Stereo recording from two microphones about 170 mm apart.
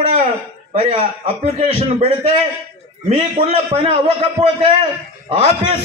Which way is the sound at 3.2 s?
35° right (ahead or behind).